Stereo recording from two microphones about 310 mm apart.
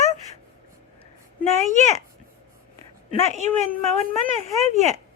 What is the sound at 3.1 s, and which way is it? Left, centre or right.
A woman's voice, right.